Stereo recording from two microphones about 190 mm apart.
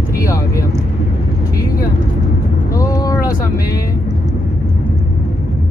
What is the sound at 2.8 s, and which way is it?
Vehicle, 20° left (ahead or behind).